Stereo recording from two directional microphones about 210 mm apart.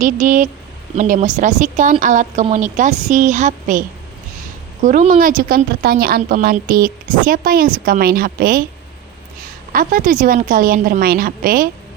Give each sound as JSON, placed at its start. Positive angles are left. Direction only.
{"t": 0.0, "sound": "a woman's voice", "side_deg": -35}
{"t": 9.7, "sound": "speech", "side_deg": -40}